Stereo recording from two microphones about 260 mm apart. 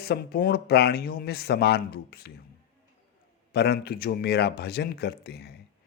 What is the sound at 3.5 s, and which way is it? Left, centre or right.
Speech, left.